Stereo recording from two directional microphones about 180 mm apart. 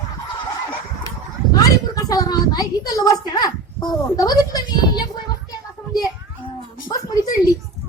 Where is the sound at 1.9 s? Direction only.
20° left (ahead or behind).